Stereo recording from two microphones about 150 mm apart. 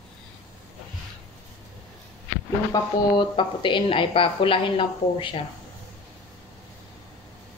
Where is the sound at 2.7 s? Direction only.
30° left (ahead or behind).